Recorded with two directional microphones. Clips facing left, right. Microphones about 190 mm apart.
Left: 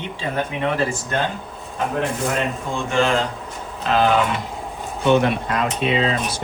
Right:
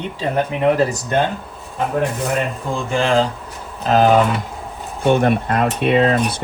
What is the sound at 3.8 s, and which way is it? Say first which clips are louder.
Speech: right 4 dB; 40° right (ahead or behind).